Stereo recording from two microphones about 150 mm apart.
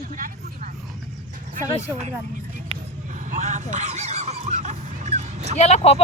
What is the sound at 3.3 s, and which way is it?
Music, 55° right (ahead or behind).